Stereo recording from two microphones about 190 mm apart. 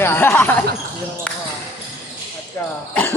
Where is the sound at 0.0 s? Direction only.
10° left (ahead or behind).